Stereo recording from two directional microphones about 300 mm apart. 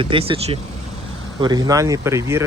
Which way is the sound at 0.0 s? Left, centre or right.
Centre.